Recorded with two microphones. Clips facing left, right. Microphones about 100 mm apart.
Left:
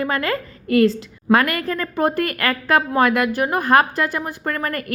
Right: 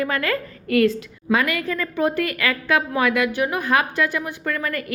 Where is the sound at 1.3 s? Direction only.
50° left (ahead or behind).